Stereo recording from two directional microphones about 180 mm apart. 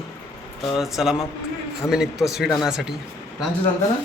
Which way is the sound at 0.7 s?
Centre (ahead or behind).